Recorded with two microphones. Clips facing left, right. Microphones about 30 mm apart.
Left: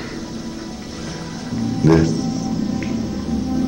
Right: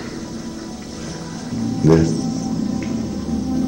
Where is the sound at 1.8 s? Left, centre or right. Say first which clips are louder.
Even; centre.